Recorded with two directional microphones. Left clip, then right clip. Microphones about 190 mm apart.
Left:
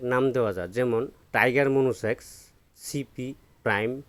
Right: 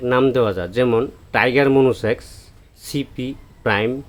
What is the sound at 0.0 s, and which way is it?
Speech, 35° left (ahead or behind).